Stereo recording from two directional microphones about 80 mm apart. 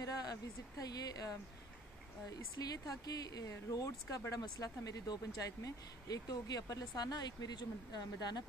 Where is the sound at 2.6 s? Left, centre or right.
Left.